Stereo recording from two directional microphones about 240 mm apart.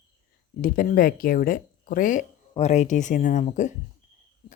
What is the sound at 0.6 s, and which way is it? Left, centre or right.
Speech, left.